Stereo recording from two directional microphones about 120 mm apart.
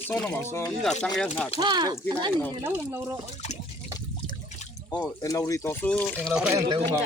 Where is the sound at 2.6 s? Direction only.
20° right (ahead or behind).